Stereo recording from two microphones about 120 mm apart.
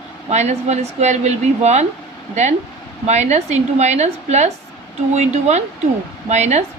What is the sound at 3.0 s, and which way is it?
A woman's voice, 70° right (ahead or behind).